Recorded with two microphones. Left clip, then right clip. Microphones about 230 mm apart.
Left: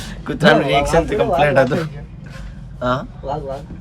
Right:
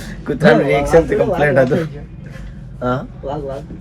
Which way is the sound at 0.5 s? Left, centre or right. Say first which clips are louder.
Right 2 dB; centre.